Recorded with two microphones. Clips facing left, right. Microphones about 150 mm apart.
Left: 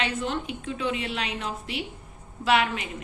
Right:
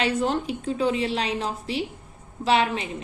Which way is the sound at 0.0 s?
40° right (ahead or behind).